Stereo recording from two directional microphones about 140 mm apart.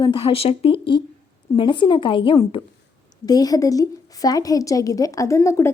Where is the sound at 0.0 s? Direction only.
40° left (ahead or behind).